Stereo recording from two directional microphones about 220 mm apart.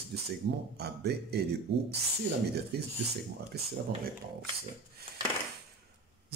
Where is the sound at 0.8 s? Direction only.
45° right (ahead or behind).